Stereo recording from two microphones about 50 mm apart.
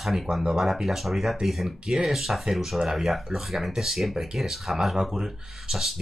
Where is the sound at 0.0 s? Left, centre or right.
Centre.